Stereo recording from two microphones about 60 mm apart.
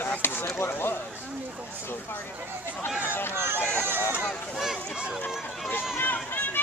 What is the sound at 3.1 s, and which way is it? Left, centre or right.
Speech, left.